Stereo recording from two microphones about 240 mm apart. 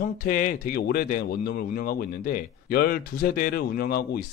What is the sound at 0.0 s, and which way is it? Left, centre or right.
Speech, left.